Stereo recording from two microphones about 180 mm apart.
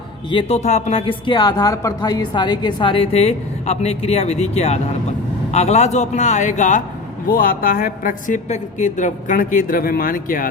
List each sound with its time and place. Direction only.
0.3 s a man's voice: 30° left (ahead or behind); by 10.5 s 50° left (ahead or behind)